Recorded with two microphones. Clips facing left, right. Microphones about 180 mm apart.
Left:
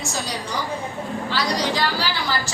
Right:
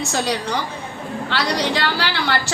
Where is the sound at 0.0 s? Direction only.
65° right (ahead or behind).